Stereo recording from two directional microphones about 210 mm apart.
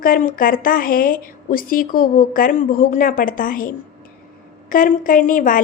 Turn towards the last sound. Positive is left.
turn(degrees=40)  # may be behind; listen again after turning